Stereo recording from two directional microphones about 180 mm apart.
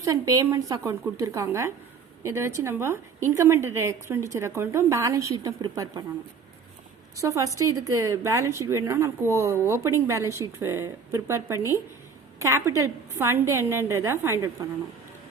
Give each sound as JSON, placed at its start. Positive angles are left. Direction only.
{"t": 0.0, "sound": "a woman's voice", "side_deg": -20}
{"t": 7.2, "sound": "a woman's voice", "side_deg": -15}